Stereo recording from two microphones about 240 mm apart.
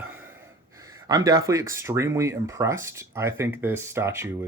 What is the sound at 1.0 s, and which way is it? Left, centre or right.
Speech, centre.